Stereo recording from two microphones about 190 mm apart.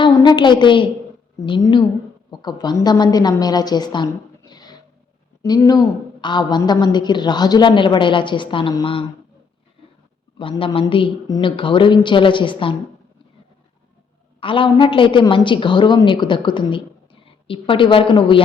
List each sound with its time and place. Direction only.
0.0 s a woman's voice: 25° left (ahead or behind)
10.3 s a woman's voice: 25° left (ahead or behind)
14.4 s a woman's voice: 25° left (ahead or behind)